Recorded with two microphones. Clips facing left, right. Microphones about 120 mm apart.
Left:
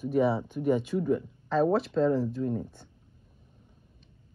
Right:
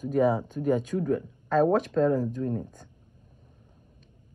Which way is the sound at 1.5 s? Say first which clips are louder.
Right 2 dB; 45° right (ahead or behind).